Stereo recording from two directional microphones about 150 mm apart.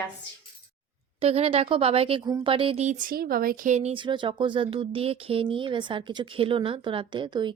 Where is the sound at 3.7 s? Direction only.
50° right (ahead or behind).